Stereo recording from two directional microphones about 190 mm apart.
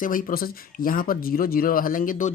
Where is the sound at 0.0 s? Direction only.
45° left (ahead or behind).